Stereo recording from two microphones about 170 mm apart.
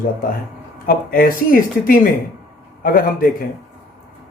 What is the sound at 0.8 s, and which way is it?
Speech, 55° left (ahead or behind).